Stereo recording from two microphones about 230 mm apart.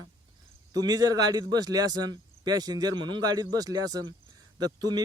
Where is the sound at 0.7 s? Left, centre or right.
Centre.